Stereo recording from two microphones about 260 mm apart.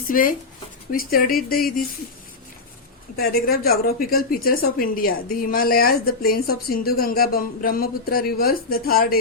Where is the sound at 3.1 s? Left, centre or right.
Left.